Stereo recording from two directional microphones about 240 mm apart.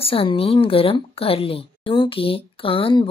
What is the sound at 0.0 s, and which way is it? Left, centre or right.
A woman's voice, left.